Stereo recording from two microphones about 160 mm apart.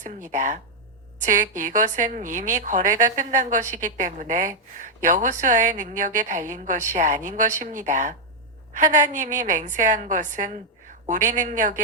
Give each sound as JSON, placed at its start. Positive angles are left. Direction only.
{"t": 0.0, "sound": "a woman's voice", "side_deg": -50}